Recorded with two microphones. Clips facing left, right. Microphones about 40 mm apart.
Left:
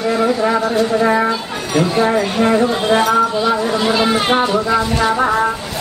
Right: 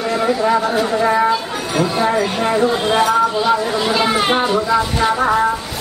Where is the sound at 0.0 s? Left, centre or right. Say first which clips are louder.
Left 1 dB; centre.